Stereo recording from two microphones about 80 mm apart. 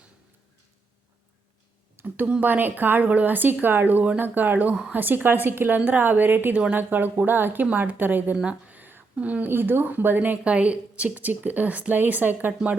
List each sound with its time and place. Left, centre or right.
2.0 s speech: right